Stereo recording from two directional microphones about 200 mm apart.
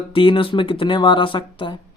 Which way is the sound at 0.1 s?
25° left (ahead or behind).